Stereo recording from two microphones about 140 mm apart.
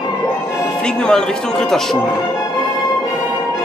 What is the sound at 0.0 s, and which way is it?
Music, 30° left (ahead or behind).